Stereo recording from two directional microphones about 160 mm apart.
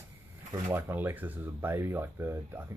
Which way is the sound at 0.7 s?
15° right (ahead or behind).